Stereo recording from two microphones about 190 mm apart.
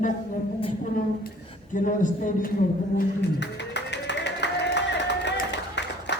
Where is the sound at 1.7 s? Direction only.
45° left (ahead or behind).